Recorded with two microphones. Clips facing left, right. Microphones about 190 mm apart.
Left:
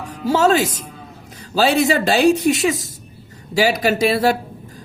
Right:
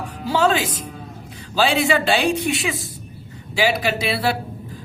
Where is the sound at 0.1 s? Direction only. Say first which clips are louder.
Left 4 dB; 45° left (ahead or behind).